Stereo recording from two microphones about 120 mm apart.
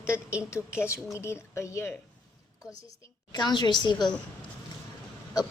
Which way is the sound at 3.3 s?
35° left (ahead or behind).